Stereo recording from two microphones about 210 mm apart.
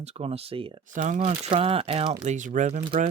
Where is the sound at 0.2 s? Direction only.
30° right (ahead or behind).